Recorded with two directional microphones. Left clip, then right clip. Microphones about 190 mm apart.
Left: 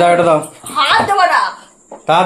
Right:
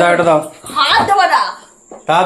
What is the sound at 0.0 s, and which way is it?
A woman's voice, 20° left (ahead or behind).